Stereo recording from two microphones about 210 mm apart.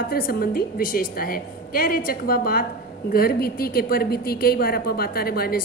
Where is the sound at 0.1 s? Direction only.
45° left (ahead or behind).